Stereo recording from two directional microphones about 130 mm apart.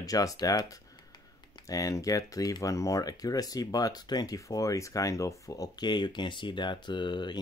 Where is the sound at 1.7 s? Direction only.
25° left (ahead or behind).